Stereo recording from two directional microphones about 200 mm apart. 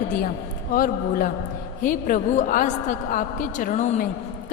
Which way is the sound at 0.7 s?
45° left (ahead or behind).